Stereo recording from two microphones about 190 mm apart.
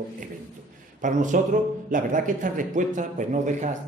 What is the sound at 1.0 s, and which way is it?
A man's voice, 40° right (ahead or behind).